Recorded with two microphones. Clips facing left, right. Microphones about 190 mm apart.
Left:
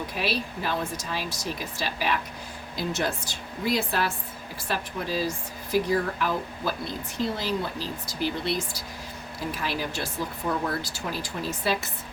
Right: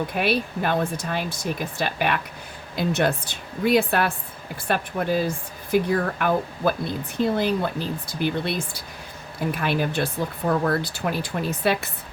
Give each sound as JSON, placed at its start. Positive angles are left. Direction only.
{"t": 0.1, "sound": "speech", "side_deg": -55}